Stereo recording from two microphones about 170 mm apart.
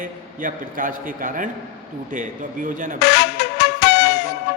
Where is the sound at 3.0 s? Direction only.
75° left (ahead or behind).